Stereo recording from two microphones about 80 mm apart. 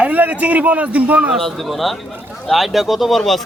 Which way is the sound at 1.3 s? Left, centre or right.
Centre.